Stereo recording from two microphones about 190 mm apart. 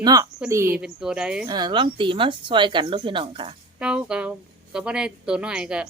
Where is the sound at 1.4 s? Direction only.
25° right (ahead or behind).